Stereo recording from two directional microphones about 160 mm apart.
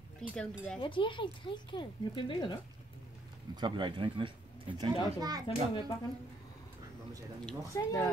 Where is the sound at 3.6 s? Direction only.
30° right (ahead or behind).